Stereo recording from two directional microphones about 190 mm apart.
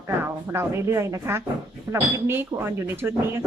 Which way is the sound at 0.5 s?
15° right (ahead or behind).